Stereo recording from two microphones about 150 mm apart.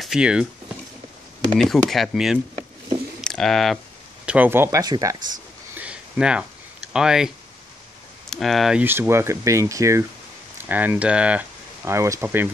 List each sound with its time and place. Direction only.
0.0 s speech: 5° right (ahead or behind)
1.6 s speech: centre (ahead or behind)
4.3 s speech: 15° right (ahead or behind)
5.8 s a sound: 5° right (ahead or behind)
6.9 s speech: 5° right (ahead or behind)
8.3 s speech: centre (ahead or behind)
8.8 s speech: 15° right (ahead or behind)